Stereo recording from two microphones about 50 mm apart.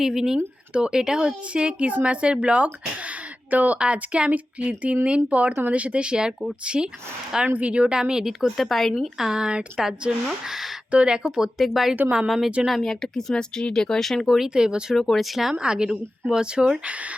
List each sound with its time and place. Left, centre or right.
0.0 s a woman's voice: centre
3.5 s speech: right
3.8 s speech: right
7.4 s a woman's voice: right; by 8.6 s centre
8.6 s speech: centre
9.1 s a woman's voice: centre
10.9 s a woman's voice: centre
14.3 s speech: centre
14.5 s a woman's voice: centre
14.9 s speech: centre
15.5 s a woman's voice: centre